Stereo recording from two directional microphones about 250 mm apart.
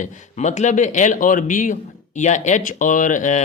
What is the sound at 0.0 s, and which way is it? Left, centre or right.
Speech, left.